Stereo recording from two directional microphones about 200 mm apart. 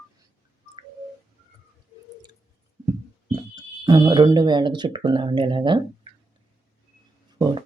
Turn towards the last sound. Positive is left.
turn(degrees=-20)  # may be behind; listen again after turning